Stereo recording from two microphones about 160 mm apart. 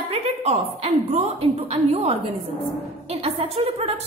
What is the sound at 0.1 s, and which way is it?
A woman's voice, 40° right (ahead or behind).